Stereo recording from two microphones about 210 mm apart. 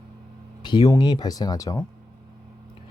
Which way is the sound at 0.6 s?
20° left (ahead or behind).